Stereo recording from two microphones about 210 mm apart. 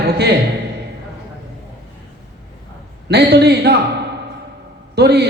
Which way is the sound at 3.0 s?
50° right (ahead or behind).